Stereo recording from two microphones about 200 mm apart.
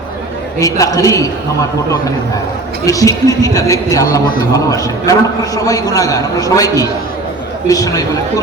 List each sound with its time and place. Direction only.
0.6 s a man's voice: 15° left (ahead or behind)
2.8 s a man's voice: 15° left (ahead or behind)